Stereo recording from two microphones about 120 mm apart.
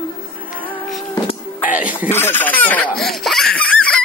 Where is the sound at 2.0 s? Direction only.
20° left (ahead or behind).